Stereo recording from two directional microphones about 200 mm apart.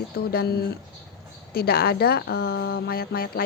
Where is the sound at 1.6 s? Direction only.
50° left (ahead or behind).